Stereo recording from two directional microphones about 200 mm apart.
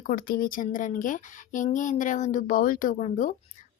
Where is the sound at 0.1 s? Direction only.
45° left (ahead or behind).